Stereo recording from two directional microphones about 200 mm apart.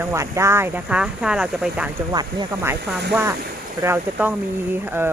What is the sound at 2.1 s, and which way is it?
Speech, 20° right (ahead or behind).